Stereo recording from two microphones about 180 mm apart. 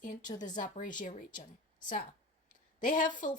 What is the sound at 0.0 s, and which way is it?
A woman's voice, 45° left (ahead or behind).